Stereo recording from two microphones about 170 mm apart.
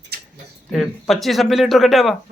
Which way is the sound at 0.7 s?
Centre (ahead or behind).